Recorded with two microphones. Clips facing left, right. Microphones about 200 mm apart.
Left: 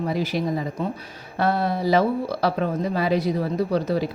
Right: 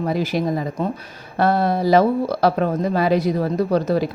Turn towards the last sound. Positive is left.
turn(degrees=-45)  # may be behind; listen again after turning